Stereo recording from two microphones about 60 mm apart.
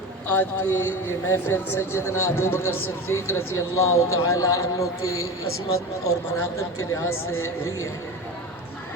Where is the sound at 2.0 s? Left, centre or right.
Left.